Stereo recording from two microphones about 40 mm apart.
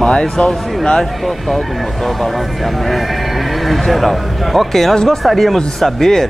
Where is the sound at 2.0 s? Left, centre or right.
Centre.